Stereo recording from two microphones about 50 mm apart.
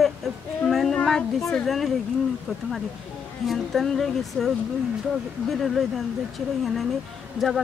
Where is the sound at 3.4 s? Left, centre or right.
Centre.